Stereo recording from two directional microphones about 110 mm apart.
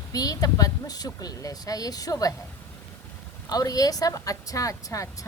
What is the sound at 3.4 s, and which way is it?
Speech, 35° left (ahead or behind).